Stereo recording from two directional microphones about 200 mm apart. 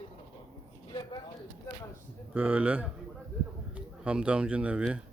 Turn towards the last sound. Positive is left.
turn(degrees=-5)  # may be behind; listen again after turning